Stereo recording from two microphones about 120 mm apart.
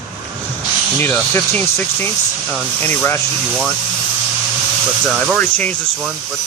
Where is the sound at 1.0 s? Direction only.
15° left (ahead or behind).